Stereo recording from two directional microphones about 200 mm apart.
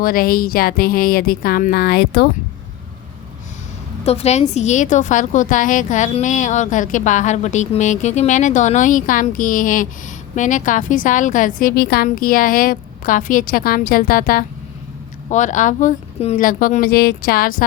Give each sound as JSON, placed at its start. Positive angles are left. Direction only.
{"t": 0.0, "sound": "speech", "side_deg": 45}
{"t": 4.0, "sound": "a woman's voice", "side_deg": 30}